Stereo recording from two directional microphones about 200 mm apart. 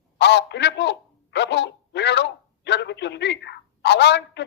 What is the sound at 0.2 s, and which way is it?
A man's voice, 60° left (ahead or behind).